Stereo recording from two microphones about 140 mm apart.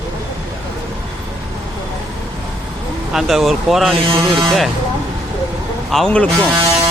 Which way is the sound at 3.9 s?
40° right (ahead or behind).